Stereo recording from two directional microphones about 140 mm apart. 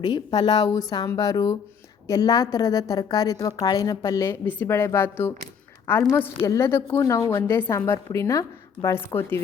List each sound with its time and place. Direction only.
0.0 s a woman's voice: 35° left (ahead or behind); by 9.4 s 20° left (ahead or behind)